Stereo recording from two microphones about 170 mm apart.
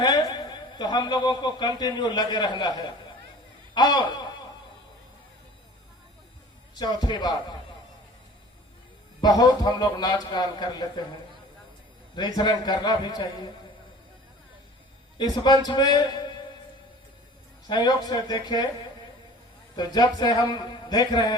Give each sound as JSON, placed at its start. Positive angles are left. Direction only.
{"t": 0.0, "sound": "a man's voice", "side_deg": 25}
{"t": 6.7, "sound": "a man's voice", "side_deg": 25}
{"t": 9.4, "sound": "a man's voice", "side_deg": 25}
{"t": 12.1, "sound": "a man's voice", "side_deg": 25}
{"t": 15.2, "sound": "a man's voice", "side_deg": 25}
{"t": 17.7, "sound": "a man's voice", "side_deg": 25}
{"t": 19.7, "sound": "a man's voice", "side_deg": 25}